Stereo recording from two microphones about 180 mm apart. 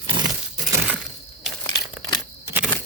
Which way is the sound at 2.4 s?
10° right (ahead or behind).